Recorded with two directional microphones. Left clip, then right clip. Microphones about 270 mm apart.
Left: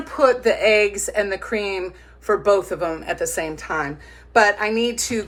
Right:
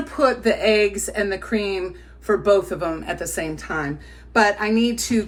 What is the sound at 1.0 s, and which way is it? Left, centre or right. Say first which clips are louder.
Speech: left 2 dB; centre.